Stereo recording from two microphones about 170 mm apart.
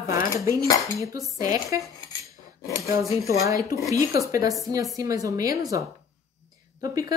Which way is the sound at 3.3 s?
20° right (ahead or behind).